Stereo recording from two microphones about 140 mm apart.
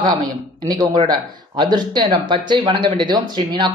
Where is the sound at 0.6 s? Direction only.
35° right (ahead or behind).